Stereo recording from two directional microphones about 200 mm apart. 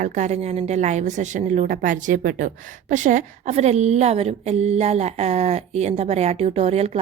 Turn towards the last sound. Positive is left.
turn(degrees=-30)  # may be behind; listen again after turning